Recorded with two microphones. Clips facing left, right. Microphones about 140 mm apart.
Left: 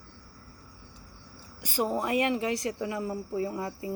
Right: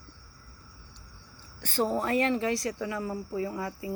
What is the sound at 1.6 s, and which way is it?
Speech, 10° left (ahead or behind).